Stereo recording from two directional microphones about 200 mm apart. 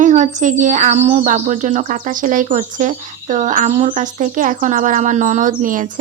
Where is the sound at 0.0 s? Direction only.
40° right (ahead or behind).